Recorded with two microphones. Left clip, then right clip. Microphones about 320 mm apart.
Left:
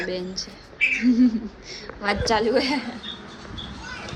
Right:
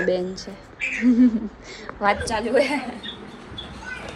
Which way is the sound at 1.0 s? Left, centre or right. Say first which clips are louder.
Right 2 dB; centre.